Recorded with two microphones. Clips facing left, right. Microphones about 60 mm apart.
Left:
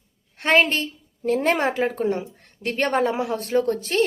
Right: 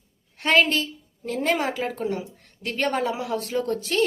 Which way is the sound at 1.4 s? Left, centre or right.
Left.